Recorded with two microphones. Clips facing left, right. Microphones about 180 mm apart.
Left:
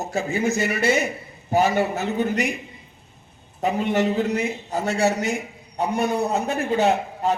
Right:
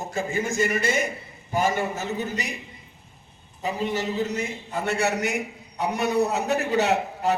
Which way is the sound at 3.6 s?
65° left (ahead or behind).